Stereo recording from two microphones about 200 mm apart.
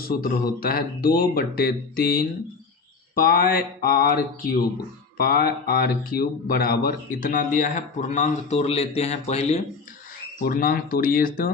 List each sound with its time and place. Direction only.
0.0 s speech: 50° left (ahead or behind); by 9.6 s 30° left (ahead or behind)
10.4 s speech: 45° left (ahead or behind)